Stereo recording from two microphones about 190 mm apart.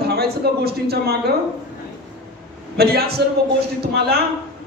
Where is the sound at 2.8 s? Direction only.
55° right (ahead or behind).